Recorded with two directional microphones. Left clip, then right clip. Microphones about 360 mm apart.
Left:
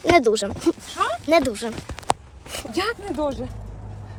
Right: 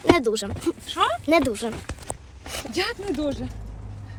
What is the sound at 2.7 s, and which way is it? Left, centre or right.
Speech, left.